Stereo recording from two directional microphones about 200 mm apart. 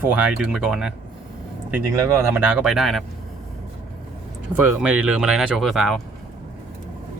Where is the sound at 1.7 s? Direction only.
15° right (ahead or behind).